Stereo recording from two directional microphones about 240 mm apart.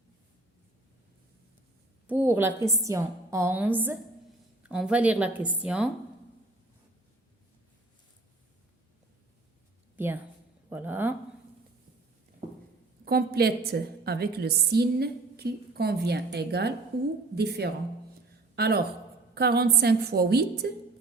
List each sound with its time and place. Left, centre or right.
2.0 s a woman's voice: centre
9.9 s a sound: centre
10.7 s a woman's voice: centre
13.1 s a woman's voice: right